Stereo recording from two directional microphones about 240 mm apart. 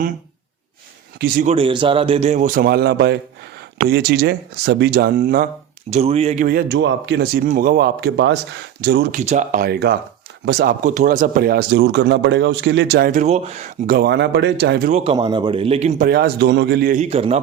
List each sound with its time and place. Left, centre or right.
1.2 s speech: right
1.5 s speech: right
5.9 s speech: right
6.5 s speech: right
9.2 s speech: right
13.9 s speech: right